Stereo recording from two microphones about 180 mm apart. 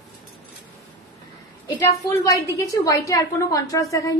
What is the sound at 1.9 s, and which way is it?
A woman's voice, 15° left (ahead or behind).